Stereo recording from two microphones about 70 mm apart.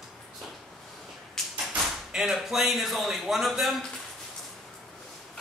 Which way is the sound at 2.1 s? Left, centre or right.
Centre.